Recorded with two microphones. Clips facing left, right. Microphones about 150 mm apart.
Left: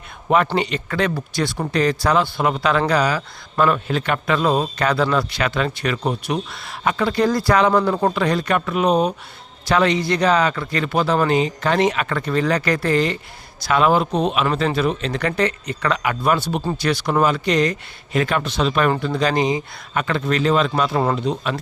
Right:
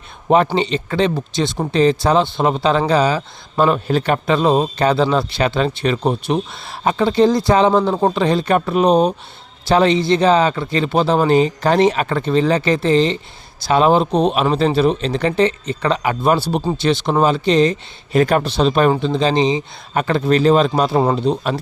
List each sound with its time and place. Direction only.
0.5 s speech: 25° right (ahead or behind)
18.2 s speech: 40° right (ahead or behind); by 20.0 s 25° right (ahead or behind)
20.0 s speech: 35° right (ahead or behind)